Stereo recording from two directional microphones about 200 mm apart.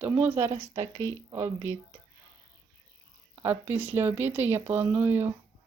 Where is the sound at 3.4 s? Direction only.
10° right (ahead or behind).